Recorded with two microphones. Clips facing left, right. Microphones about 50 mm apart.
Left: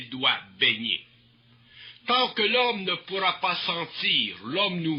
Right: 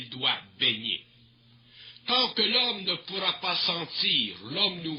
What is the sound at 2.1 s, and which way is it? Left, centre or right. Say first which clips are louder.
Speech: left 4 dB; left.